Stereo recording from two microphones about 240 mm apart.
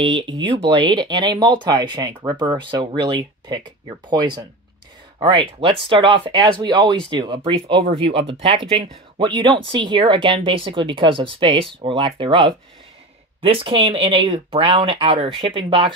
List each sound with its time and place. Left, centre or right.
0.0 s speech: right